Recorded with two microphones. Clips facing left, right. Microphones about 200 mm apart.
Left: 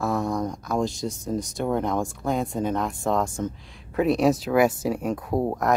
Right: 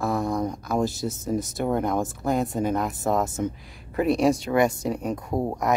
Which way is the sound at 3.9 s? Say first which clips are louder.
Even; centre (ahead or behind).